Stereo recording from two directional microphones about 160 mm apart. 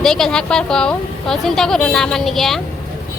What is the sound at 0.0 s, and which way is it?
A woman's voice, 5° left (ahead or behind).